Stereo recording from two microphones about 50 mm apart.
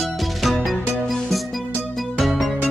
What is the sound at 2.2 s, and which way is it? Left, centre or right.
Music, centre.